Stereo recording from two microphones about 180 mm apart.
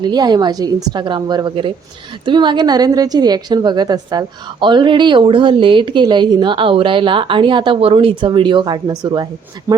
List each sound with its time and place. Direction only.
0.0 s a woman's voice: 25° right (ahead or behind)